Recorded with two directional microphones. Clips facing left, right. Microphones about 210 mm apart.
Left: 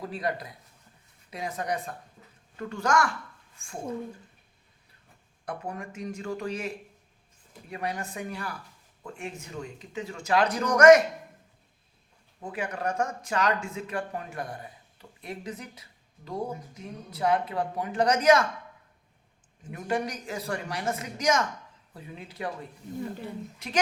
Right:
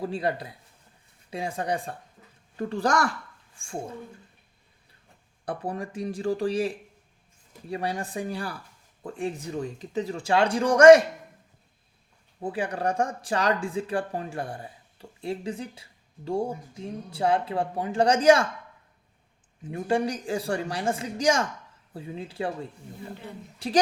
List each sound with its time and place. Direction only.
0.0 s a man's voice: 30° right (ahead or behind)
5.5 s a man's voice: 35° right (ahead or behind)
12.4 s speech: 30° right (ahead or behind)
19.7 s speech: 30° right (ahead or behind)
23.6 s a woman's voice: 30° right (ahead or behind)